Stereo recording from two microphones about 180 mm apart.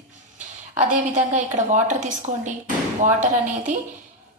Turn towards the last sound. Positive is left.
turn(degrees=-45)  # may be behind; listen again after turning